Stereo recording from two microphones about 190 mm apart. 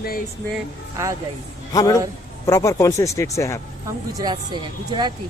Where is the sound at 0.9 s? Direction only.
15° right (ahead or behind).